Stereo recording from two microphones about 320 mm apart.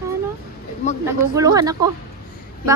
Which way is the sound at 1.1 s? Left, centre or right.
Centre.